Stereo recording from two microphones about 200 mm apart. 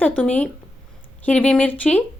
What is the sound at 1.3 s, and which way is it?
Speech, 5° left (ahead or behind).